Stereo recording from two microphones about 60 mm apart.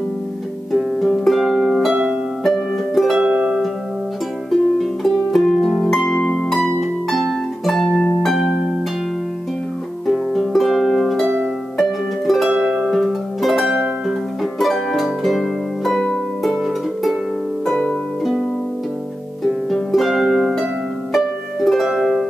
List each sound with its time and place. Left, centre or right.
0.7 s harp: centre
2.4 s music: centre
3.2 s music: centre
4.5 s harp: centre
6.0 s harp: centre
6.5 s harp: centre
10.0 s music: centre
12.4 s music: centre
16.6 s harp: centre
19.4 s harp: centre
21.6 s music: centre